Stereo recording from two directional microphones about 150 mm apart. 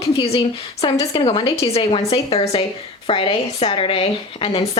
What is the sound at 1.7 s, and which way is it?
A woman's voice, 40° left (ahead or behind).